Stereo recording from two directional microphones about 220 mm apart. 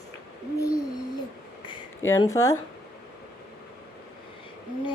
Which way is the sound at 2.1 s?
15° left (ahead or behind).